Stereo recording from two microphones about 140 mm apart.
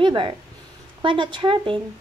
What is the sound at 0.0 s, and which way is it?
Speech, 35° right (ahead or behind).